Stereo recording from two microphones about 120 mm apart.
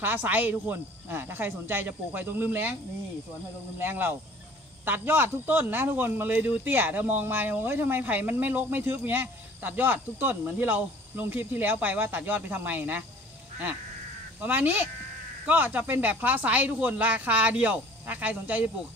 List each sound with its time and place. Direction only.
0.0 s speech: 15° right (ahead or behind)
3.8 s speech: 15° right (ahead or behind)
14.4 s speech: 15° right (ahead or behind)